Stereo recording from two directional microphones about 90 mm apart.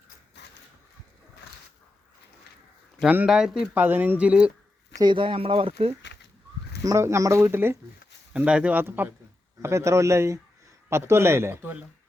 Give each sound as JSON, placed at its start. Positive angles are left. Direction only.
{"t": 3.2, "sound": "speech", "side_deg": -5}
{"t": 3.8, "sound": "speech", "side_deg": -20}
{"t": 5.0, "sound": "speech", "side_deg": -70}
{"t": 6.8, "sound": "a man's voice", "side_deg": -35}
{"t": 8.3, "sound": "speech", "side_deg": -15}
{"t": 8.8, "sound": "a man's voice", "side_deg": -25}